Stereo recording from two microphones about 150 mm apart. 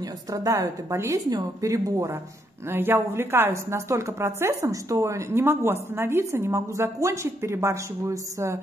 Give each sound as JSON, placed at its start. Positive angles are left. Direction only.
{"t": 0.3, "sound": "a woman's voice", "side_deg": -20}